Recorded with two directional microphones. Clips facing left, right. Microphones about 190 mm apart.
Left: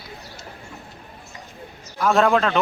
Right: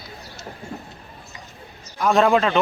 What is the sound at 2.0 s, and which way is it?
Speech, centre (ahead or behind).